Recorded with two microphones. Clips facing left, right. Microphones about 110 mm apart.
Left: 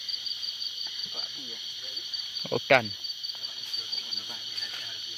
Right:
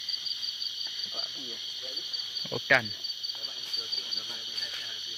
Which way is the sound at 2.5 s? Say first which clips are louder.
Left 5 dB; 55° left (ahead or behind).